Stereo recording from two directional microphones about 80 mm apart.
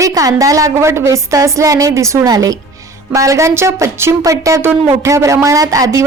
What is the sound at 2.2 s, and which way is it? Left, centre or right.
A woman's voice, right.